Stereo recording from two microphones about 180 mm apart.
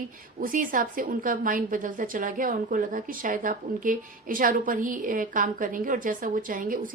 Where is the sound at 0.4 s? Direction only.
50° right (ahead or behind).